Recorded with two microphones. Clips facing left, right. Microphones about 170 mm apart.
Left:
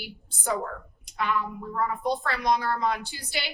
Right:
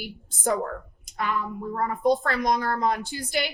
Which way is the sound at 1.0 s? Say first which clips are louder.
Left 1 dB; 45° right (ahead or behind).